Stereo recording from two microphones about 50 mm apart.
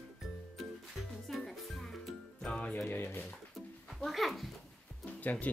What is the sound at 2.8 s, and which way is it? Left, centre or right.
Speech, left.